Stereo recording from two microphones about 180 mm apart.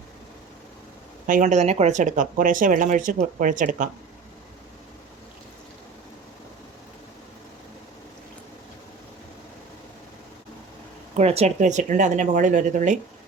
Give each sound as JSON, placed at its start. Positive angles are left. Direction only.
{"t": 1.3, "sound": "speech", "side_deg": -45}
{"t": 11.1, "sound": "speech", "side_deg": -35}